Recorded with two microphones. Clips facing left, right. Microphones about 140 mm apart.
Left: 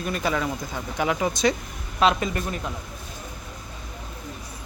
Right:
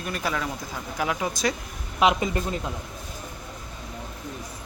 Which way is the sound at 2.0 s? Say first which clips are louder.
Even; 20° right (ahead or behind).